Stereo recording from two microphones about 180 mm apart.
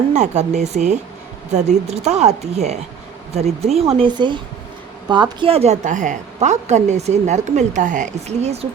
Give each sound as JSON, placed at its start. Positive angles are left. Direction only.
{"t": 0.1, "sound": "a woman's voice", "side_deg": -40}